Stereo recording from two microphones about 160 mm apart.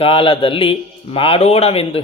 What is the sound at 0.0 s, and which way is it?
A man's voice, 35° left (ahead or behind).